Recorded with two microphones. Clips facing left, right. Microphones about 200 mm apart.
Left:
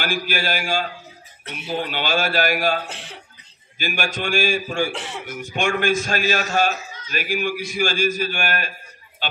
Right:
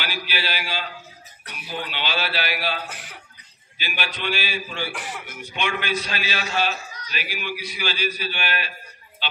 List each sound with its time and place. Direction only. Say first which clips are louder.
0.0 s a man's voice: left 6 dB; 45° left (ahead or behind)
1.4 s speech: left 7 dB; 25° left (ahead or behind)
1.7 s a man's voice: left 6 dB; 45° left (ahead or behind)
2.9 s speech: left 3 dB; 25° left (ahead or behind)
3.7 s a man's voice: left 6 dB; 45° left (ahead or behind)
4.9 s speech: left 3 dB; 25° left (ahead or behind)
5.3 s a man's voice: left 6 dB; 45° left (ahead or behind)
9.2 s a sound: left 3 dB; 45° left (ahead or behind)